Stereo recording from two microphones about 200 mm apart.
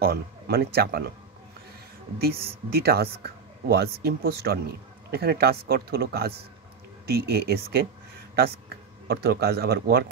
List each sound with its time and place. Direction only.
0.0 s speech: 50° right (ahead or behind)
2.1 s speech: 50° right (ahead or behind)